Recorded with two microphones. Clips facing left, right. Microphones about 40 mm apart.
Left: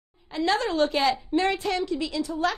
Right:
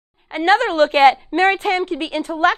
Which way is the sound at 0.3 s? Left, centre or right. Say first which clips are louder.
Right 9 dB; right.